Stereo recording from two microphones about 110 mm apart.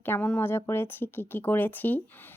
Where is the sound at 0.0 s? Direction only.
15° left (ahead or behind).